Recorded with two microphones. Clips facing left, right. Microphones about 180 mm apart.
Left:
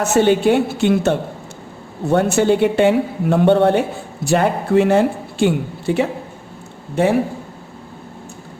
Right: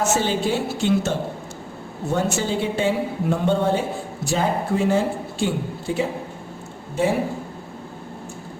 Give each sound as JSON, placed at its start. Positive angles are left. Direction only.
{"t": 0.0, "sound": "a woman's voice", "side_deg": 60}
{"t": 2.1, "sound": "a woman's voice", "side_deg": 60}